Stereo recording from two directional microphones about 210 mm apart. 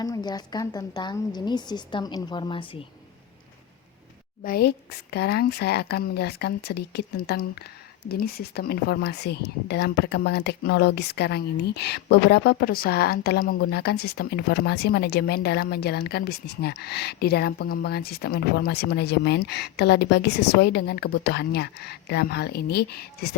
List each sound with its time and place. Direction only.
0.0 s a woman's voice: 20° left (ahead or behind)
4.4 s speech: 50° left (ahead or behind)